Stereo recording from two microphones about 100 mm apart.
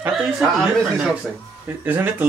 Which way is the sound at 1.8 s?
20° right (ahead or behind).